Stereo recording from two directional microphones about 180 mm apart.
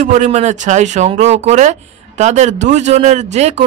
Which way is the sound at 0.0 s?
40° right (ahead or behind).